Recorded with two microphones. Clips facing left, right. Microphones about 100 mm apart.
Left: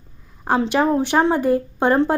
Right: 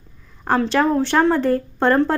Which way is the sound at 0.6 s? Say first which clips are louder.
Even; 15° left (ahead or behind).